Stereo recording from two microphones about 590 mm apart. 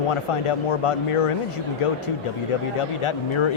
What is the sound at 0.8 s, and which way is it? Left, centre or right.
Speech, left.